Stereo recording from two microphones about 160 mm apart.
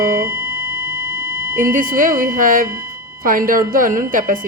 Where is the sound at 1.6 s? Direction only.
55° right (ahead or behind).